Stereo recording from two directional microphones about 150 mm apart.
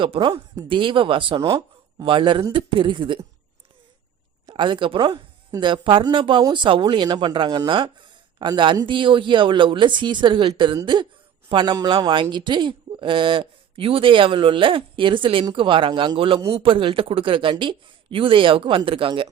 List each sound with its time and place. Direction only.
0.0 s speech: 35° right (ahead or behind)
1.4 s speech: 20° right (ahead or behind)
4.4 s speech: 30° right (ahead or behind)